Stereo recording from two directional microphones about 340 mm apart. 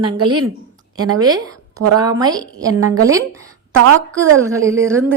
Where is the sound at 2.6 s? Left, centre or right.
Right.